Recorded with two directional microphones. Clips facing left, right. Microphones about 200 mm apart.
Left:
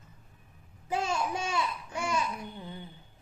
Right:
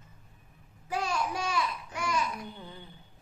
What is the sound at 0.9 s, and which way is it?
Babbling, 25° left (ahead or behind).